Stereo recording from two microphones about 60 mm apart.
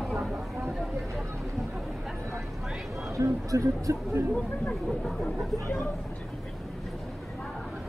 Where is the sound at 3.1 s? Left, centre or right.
Right.